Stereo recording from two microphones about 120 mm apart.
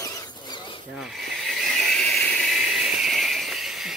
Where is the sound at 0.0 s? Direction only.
30° left (ahead or behind).